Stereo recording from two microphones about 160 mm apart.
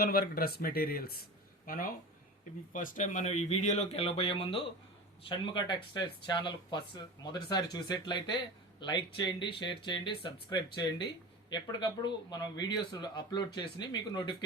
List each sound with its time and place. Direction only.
0.0 s speech: 70° left (ahead or behind); by 14.3 s 30° left (ahead or behind)